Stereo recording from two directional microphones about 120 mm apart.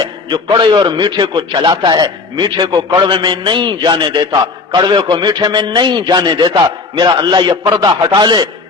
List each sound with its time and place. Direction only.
0.3 s a man's voice: 40° right (ahead or behind)